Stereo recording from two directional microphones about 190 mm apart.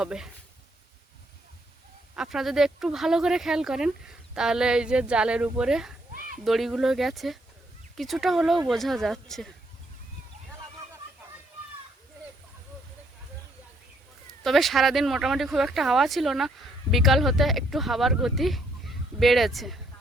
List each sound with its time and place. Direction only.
0.0 s speech: 5° right (ahead or behind)
2.1 s speech: 5° right (ahead or behind)
6.1 s a sound: 45° right (ahead or behind)
6.4 s speech: centre (ahead or behind)
14.4 s speech: centre (ahead or behind)